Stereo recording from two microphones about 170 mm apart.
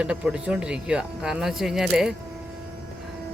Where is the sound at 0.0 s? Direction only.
5° right (ahead or behind).